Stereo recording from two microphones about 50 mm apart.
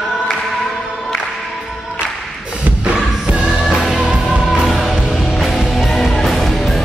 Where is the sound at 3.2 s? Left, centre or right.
Centre.